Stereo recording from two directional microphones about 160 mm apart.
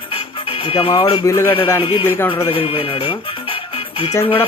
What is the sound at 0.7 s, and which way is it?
Speech, 35° left (ahead or behind).